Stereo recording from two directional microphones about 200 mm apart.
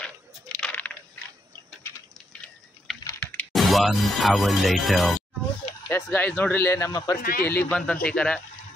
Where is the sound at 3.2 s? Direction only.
5° left (ahead or behind).